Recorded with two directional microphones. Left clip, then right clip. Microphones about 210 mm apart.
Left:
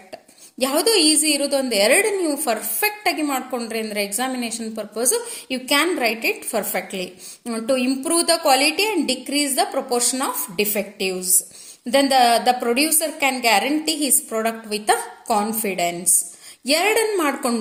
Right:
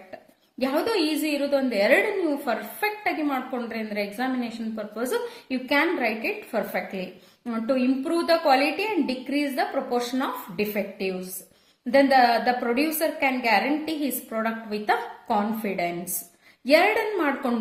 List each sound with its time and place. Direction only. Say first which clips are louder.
0.6 s a woman's voice: left 6 dB; 45° left (ahead or behind)